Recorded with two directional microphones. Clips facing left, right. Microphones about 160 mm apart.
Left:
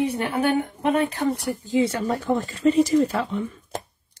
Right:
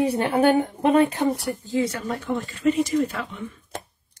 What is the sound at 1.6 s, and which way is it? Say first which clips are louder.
Speech: left 3 dB; 20° left (ahead or behind).